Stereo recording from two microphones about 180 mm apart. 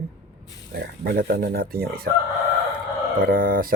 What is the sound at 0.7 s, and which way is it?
Speech, 55° right (ahead or behind).